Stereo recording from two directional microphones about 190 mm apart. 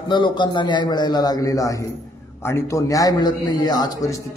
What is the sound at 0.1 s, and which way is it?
A man's voice, 25° left (ahead or behind).